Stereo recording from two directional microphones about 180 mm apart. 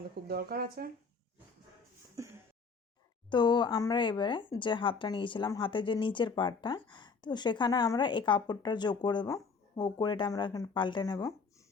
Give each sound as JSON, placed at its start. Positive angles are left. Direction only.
{"t": 0.3, "sound": "speech", "side_deg": -60}
{"t": 2.1, "sound": "a sound", "side_deg": -15}
{"t": 3.2, "sound": "speech", "side_deg": 25}